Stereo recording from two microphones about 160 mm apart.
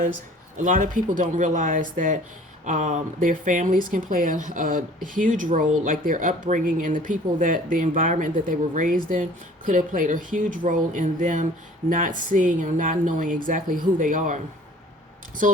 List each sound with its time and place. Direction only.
0.6 s a woman's voice: 55° right (ahead or behind)